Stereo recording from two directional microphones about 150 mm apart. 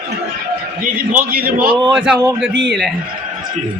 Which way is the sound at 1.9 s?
5° right (ahead or behind).